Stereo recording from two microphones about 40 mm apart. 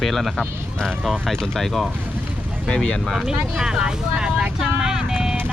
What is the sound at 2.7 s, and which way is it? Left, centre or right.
Speech, left.